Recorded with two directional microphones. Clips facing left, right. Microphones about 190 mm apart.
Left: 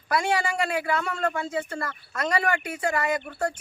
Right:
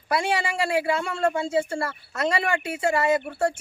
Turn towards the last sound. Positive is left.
turn(degrees=-25)  # may be behind; listen again after turning